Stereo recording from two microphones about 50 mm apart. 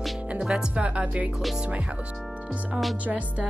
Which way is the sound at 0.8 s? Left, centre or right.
Right.